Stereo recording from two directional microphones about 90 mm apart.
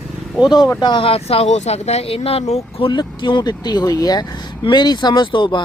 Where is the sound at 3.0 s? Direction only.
60° left (ahead or behind).